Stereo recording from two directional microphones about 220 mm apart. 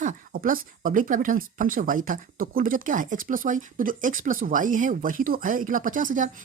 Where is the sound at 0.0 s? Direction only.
35° right (ahead or behind).